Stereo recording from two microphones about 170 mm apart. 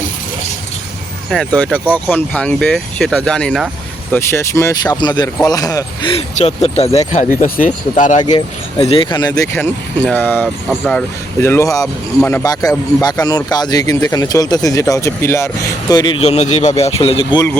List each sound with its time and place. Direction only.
1.5 s speech: 10° left (ahead or behind)
4.1 s speech: 15° left (ahead or behind); by 8.2 s 50° left (ahead or behind)
8.2 s speech: 25° left (ahead or behind)
10.1 s speech: 10° left (ahead or behind)
11.3 s speech: 15° left (ahead or behind); by 17.4 s 35° left (ahead or behind)